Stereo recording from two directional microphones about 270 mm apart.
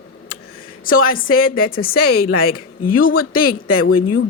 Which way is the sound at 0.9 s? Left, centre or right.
Left.